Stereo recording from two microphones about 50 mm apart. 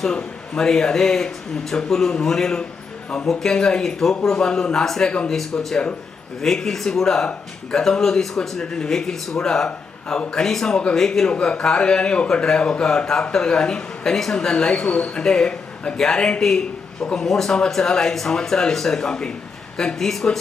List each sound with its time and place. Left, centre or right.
0.1 s speech: centre
6.4 s speech: centre
11.3 s speech: left; by 20.4 s centre